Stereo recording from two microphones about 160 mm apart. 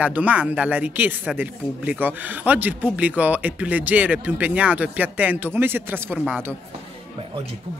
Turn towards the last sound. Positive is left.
turn(degrees=-10)  # may be behind; listen again after turning